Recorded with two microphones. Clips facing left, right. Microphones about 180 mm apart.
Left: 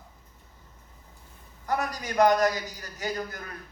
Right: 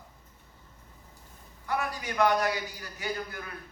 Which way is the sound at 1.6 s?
40° left (ahead or behind).